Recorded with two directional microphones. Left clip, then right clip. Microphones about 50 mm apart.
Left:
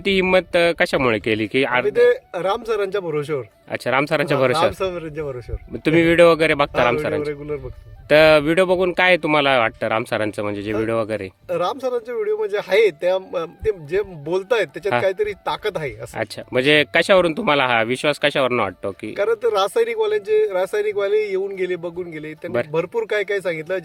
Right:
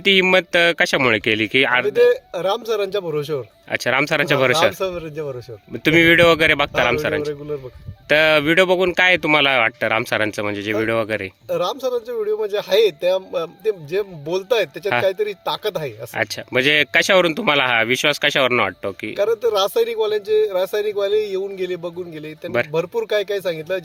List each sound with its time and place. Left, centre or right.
0.0 s speech: left
1.8 s speech: centre
3.7 s speech: centre
4.6 s speech: centre
5.8 s speech: centre
9.5 s speech: centre
10.7 s speech: centre
11.4 s speech: centre
16.1 s speech: centre
18.5 s speech: centre
19.1 s speech: centre